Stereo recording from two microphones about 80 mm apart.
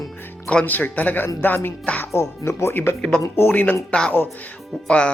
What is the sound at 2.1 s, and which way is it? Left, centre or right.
A man's voice, left.